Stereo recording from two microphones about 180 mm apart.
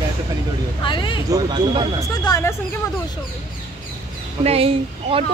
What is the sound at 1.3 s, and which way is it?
Speech, 20° right (ahead or behind).